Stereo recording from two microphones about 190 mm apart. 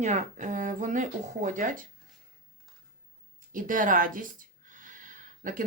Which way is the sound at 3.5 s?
45° right (ahead or behind).